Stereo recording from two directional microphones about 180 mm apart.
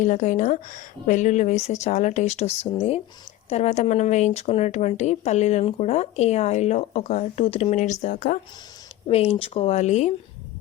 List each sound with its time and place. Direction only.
0.0 s speech: 45° left (ahead or behind)
9.0 s speech: 35° left (ahead or behind)